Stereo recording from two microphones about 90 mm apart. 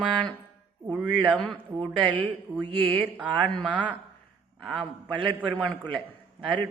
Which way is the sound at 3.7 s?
15° left (ahead or behind).